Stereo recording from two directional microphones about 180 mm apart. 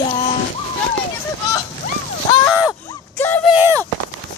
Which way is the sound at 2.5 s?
5° right (ahead or behind).